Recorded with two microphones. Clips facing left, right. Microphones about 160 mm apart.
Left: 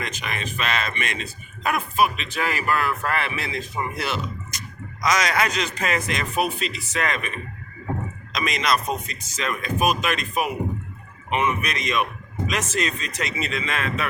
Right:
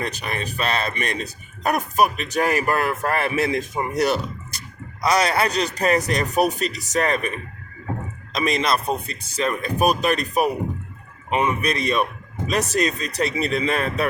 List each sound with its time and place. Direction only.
0.0 s a man's voice: 35° right (ahead or behind)